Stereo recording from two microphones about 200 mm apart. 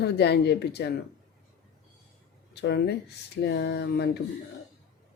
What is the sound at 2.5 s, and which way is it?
Speech, 55° left (ahead or behind).